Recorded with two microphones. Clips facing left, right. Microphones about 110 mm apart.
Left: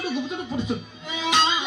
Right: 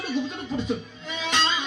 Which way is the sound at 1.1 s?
10° left (ahead or behind).